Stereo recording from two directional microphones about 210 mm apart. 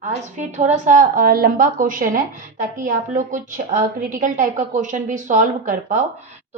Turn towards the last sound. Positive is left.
turn(degrees=-40)  # may be behind; listen again after turning